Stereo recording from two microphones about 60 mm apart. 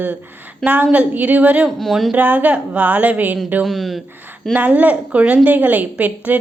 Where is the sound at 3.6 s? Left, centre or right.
Centre.